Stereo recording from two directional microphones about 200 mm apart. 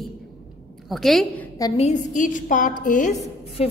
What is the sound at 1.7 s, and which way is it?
A woman's voice, 35° left (ahead or behind).